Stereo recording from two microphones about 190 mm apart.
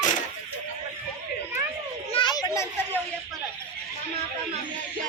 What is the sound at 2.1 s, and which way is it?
Children playing, 25° left (ahead or behind).